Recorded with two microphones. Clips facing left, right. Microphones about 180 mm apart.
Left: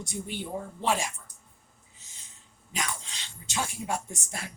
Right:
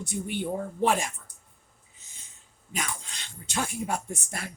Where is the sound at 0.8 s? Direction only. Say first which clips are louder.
Right 3 dB; 55° right (ahead or behind).